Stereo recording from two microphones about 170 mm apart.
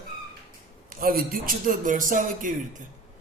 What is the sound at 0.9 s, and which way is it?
A man's voice, 60° right (ahead or behind).